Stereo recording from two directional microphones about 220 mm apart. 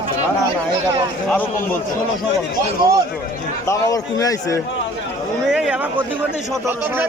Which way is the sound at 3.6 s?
15° left (ahead or behind).